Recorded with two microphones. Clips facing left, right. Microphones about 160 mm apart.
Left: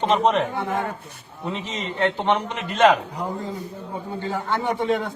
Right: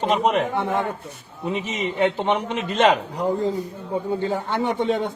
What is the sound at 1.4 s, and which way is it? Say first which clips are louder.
A man's voice: right 4 dB; 15° right (ahead or behind).